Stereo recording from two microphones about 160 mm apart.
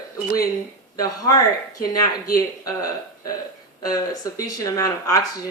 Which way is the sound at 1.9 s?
20° left (ahead or behind).